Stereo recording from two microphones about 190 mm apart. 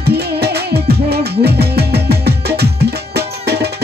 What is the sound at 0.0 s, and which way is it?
Music, 60° right (ahead or behind).